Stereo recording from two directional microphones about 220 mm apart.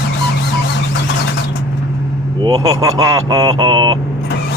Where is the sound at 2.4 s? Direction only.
20° right (ahead or behind).